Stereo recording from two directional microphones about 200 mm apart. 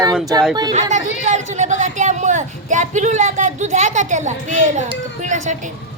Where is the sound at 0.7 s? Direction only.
35° right (ahead or behind).